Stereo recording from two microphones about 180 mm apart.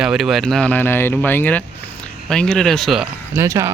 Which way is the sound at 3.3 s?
15° right (ahead or behind).